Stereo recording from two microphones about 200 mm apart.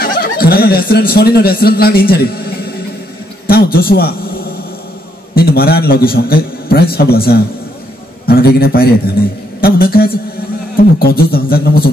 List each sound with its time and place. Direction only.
0.0 s speech: 50° left (ahead or behind)
3.4 s a man's voice: 50° left (ahead or behind)